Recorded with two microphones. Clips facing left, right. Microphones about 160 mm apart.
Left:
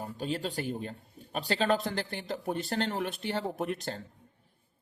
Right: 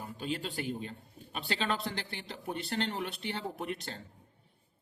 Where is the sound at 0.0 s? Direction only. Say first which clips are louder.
Left 3 dB; 40° left (ahead or behind).